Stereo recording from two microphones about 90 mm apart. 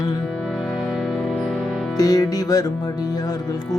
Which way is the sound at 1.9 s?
45° left (ahead or behind).